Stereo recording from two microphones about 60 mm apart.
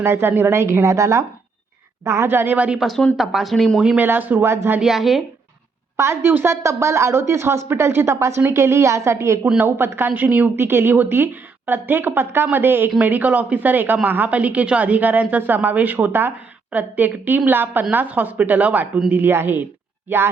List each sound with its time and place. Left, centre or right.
0.0 s speech: right
2.3 s a woman's voice: right
3.2 s speech: centre
3.8 s a woman's voice: centre
4.0 s a woman's voice: right
4.4 s speech: right
4.8 s speech: centre
6.0 s speech: right
9.6 s a woman's voice: right
10.2 s a woman's voice: right
10.5 s a woman's voice: right